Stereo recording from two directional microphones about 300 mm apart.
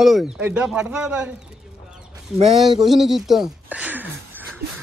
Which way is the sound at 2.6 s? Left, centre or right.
Centre.